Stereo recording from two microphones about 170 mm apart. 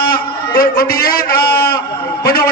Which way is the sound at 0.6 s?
60° left (ahead or behind).